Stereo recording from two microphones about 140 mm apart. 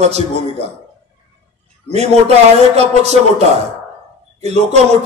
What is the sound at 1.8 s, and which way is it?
A man's voice, 50° right (ahead or behind).